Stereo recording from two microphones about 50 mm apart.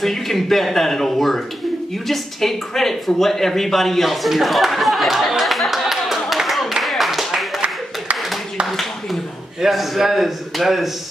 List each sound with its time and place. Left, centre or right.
0.0 s speech: centre
5.4 s clapping: centre
9.6 s speech: centre